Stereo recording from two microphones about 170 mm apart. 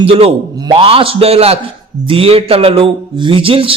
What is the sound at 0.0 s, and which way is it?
A man's voice, 35° right (ahead or behind).